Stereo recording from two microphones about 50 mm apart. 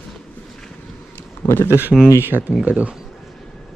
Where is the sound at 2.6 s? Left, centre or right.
Right.